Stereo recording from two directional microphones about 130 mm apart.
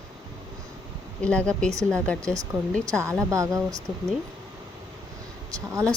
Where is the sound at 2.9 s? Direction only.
20° right (ahead or behind).